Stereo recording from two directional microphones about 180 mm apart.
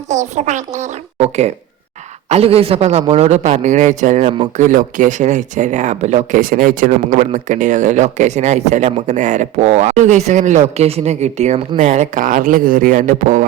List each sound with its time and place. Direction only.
0.1 s speech: 40° right (ahead or behind)